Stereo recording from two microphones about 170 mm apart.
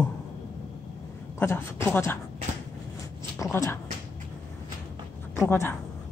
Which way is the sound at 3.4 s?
15° left (ahead or behind).